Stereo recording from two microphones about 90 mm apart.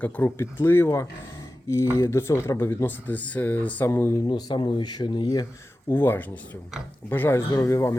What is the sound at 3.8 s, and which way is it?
Speech, 30° left (ahead or behind).